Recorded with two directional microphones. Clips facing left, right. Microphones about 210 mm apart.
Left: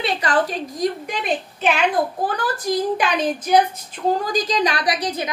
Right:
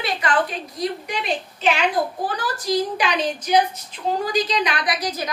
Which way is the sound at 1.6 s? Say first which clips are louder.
Left 1 dB; 55° left (ahead or behind).